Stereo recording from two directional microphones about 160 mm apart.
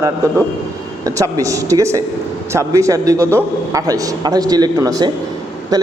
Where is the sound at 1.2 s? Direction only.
20° right (ahead or behind).